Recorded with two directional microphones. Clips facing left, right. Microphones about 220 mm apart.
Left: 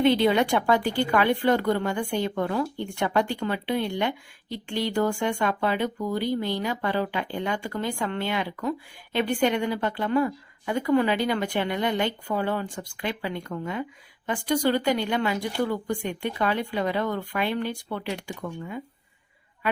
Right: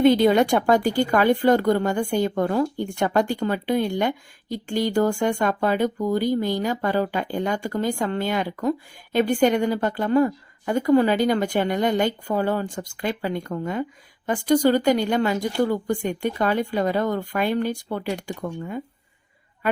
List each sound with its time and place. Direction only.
0.0 s a woman's voice: 45° right (ahead or behind)